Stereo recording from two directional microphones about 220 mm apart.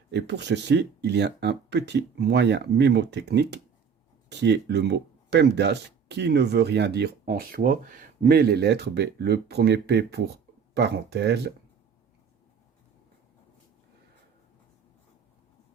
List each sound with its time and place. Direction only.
0.1 s speech: 50° right (ahead or behind)